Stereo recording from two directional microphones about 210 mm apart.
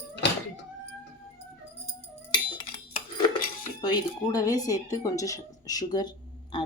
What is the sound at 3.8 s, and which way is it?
Speech, 20° left (ahead or behind).